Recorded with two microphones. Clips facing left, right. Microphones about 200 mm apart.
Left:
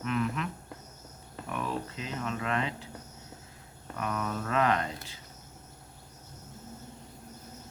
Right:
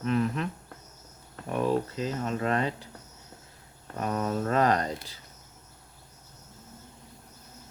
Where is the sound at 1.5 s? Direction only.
35° right (ahead or behind).